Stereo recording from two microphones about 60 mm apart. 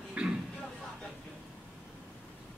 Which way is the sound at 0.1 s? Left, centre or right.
Centre.